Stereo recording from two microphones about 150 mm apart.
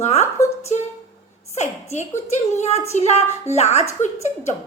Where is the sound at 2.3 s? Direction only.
50° left (ahead or behind).